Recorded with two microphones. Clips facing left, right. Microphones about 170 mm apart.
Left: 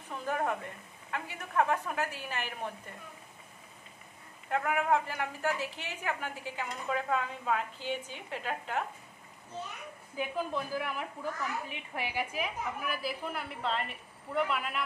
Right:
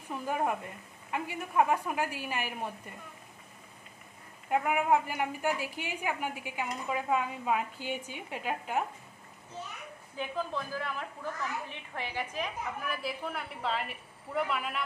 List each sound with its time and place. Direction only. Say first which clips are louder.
0.1 s a sound: right 1 dB; 10° right (ahead or behind)
1.1 s a woman's voice: right 2 dB; 10° right (ahead or behind)
4.5 s a woman's voice: right 2 dB; 15° right (ahead or behind)
10.1 s a woman's voice: left 1 dB; 10° left (ahead or behind)